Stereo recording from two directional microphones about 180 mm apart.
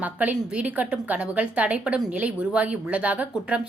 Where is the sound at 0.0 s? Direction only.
10° right (ahead or behind).